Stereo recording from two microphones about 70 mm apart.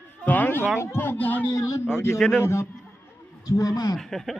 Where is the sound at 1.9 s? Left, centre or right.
Left.